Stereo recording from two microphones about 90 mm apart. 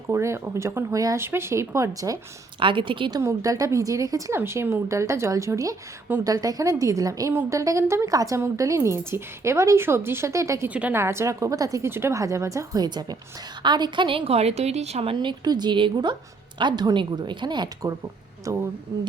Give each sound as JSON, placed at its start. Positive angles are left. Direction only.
{"t": 0.1, "sound": "a woman's voice", "side_deg": -30}
{"t": 2.6, "sound": "a woman's voice", "side_deg": -70}
{"t": 3.2, "sound": "a woman's voice", "side_deg": -35}
{"t": 4.4, "sound": "a woman's voice", "side_deg": -25}
{"t": 10.7, "sound": "a woman's voice", "side_deg": -15}
{"t": 10.9, "sound": "a woman's voice", "side_deg": -30}
{"t": 11.9, "sound": "a woman's voice", "side_deg": -30}
{"t": 15.0, "sound": "a woman's voice", "side_deg": -60}
{"t": 18.5, "sound": "a woman's voice", "side_deg": -35}